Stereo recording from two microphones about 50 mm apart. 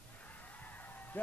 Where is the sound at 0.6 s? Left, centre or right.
Left.